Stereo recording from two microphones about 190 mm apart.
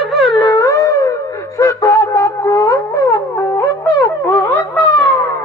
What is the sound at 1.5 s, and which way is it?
Wind instrument, 15° left (ahead or behind).